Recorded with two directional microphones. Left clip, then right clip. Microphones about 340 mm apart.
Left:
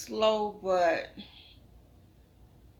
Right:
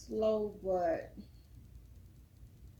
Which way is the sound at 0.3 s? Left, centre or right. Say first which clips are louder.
Left 6 dB; left.